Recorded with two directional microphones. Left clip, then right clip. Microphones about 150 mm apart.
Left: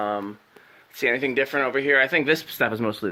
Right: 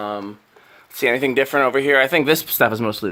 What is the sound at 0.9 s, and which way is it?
Speech, 30° right (ahead or behind).